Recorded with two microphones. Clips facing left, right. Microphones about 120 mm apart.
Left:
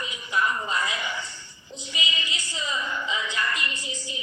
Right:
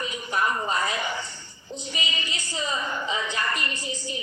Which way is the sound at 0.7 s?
40° right (ahead or behind).